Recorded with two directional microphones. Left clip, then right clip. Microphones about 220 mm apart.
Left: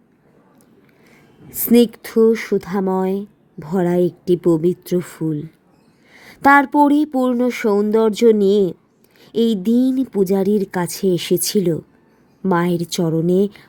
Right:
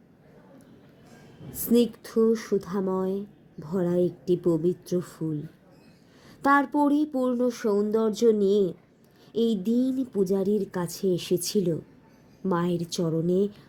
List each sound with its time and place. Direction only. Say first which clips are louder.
1.5 s speech: left 9 dB; 40° left (ahead or behind)